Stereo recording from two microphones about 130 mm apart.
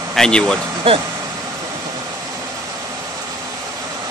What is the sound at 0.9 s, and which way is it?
Speech, 45° right (ahead or behind).